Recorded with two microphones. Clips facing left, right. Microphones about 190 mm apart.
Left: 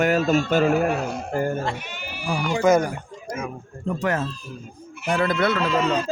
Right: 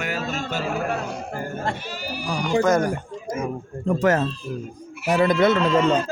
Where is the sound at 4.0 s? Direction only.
45° right (ahead or behind).